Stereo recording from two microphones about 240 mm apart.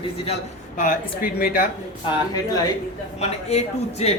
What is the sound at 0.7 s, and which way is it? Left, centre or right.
Speech, left.